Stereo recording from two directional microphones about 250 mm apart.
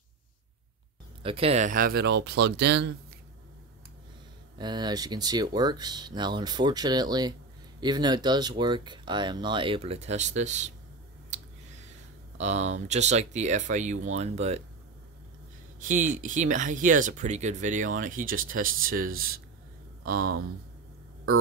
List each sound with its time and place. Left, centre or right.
1.2 s speech: right
4.6 s speech: centre
11.2 s squish: right
12.4 s speech: right
15.8 s speech: right